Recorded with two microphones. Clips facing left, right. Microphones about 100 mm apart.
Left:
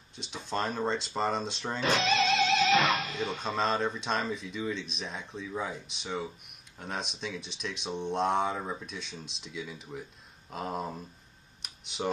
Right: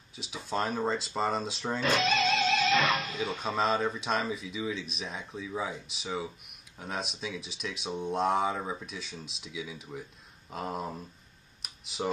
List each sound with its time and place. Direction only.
0.1 s speech: 5° right (ahead or behind)
2.5 s music: 30° left (ahead or behind)
3.2 s speech: centre (ahead or behind)
11.6 s tick: centre (ahead or behind)